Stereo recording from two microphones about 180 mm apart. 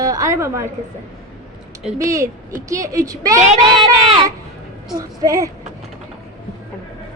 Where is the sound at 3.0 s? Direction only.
20° right (ahead or behind).